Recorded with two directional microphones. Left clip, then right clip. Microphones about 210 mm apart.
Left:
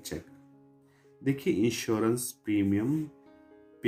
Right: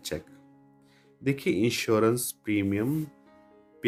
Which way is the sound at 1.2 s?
50° right (ahead or behind).